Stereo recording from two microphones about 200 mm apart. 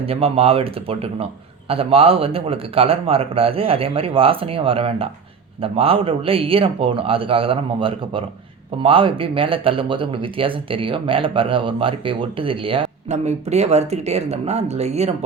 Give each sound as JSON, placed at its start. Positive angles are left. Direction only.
{"t": 0.0, "sound": "speech", "side_deg": -30}